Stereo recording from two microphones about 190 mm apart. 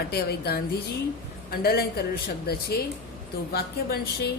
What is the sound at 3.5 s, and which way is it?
Speech, 55° left (ahead or behind).